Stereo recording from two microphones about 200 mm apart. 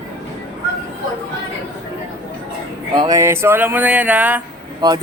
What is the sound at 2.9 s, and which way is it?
Speech, 15° right (ahead or behind).